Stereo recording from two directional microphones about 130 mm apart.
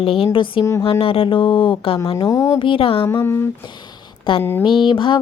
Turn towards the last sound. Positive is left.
turn(degrees=40)  # may be behind; listen again after turning